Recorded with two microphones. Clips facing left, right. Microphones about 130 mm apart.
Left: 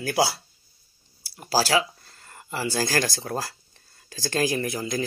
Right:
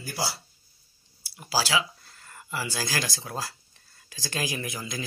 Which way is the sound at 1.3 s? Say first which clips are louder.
Left 5 dB; 45° left (ahead or behind).